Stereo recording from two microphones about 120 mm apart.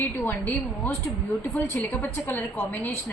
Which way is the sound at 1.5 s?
20° left (ahead or behind).